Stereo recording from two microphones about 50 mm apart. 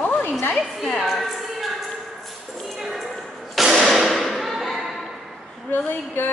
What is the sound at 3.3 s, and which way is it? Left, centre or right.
Thump, centre.